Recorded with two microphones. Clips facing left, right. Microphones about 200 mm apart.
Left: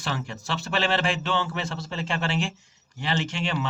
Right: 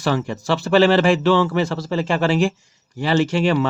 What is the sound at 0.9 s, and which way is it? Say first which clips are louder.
Speech: right 11 dB; 70° right (ahead or behind).